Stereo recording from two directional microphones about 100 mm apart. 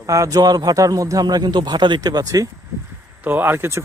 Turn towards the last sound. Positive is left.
turn(degrees=-25)  # may be behind; listen again after turning